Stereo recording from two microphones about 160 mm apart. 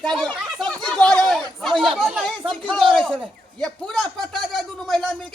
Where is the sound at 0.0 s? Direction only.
5° left (ahead or behind).